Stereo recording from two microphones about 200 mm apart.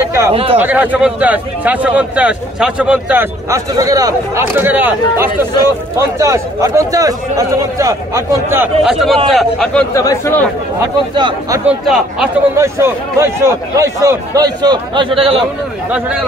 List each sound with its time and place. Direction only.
0.0 s a sound: 15° right (ahead or behind)
0.3 s speech: 25° right (ahead or behind)
0.6 s a man's voice: 10° right (ahead or behind)
8.8 s a man's voice: centre (ahead or behind)
9.9 s speech: 15° left (ahead or behind)
10.8 s a man's voice: 20° right (ahead or behind)
11.8 s a man's voice: centre (ahead or behind)
12.5 s a man's voice: 15° right (ahead or behind)
15.9 s a man's voice: 5° right (ahead or behind)